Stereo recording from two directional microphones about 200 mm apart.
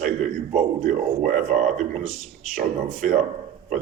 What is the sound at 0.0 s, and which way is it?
A man's voice, 40° right (ahead or behind).